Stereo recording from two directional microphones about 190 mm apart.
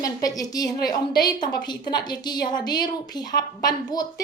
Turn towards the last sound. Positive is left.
turn(degrees=20)  # may be behind; listen again after turning